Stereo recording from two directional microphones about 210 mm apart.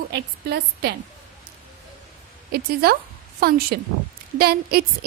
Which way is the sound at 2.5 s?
45° right (ahead or behind).